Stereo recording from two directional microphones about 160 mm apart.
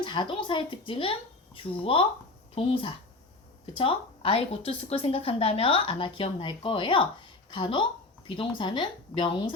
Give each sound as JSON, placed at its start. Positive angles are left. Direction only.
{"t": 0.0, "sound": "a woman's voice", "side_deg": 30}